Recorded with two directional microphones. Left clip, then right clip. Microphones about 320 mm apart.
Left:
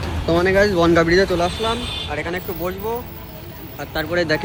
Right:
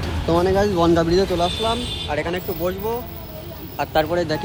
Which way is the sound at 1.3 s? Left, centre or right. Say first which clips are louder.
Left 1 dB; centre.